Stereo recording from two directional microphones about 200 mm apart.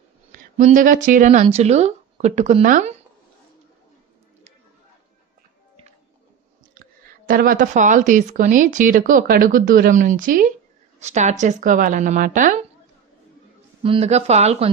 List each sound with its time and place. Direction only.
0.5 s speech: 35° right (ahead or behind)
7.3 s speech: 45° right (ahead or behind)
13.8 s speech: 30° right (ahead or behind)